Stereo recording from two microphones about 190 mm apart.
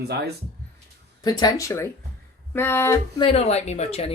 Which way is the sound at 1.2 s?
20° left (ahead or behind).